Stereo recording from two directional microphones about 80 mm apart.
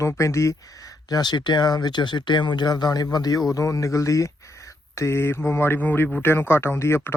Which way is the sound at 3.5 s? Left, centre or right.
Left.